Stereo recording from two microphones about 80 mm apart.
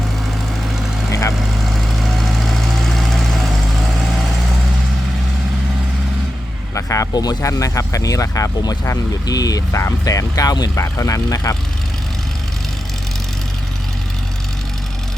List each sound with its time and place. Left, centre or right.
1.7 s vehicle: centre
6.7 s a sound: left
7.1 s speech: left